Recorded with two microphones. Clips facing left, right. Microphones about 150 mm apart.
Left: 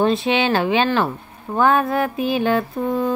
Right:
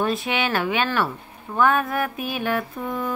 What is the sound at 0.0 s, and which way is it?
Speech, 25° left (ahead or behind).